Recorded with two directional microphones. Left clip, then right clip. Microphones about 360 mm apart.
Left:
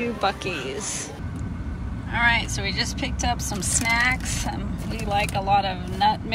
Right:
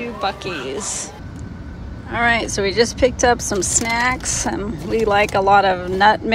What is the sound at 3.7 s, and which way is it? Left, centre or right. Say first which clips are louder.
Speech: right 1 dB; centre.